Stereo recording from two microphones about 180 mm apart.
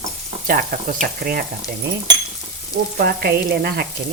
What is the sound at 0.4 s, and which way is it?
Speech, 50° right (ahead or behind).